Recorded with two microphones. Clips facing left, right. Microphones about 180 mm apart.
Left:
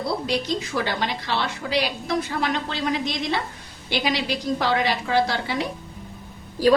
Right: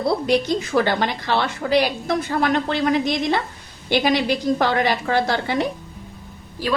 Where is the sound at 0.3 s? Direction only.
55° right (ahead or behind).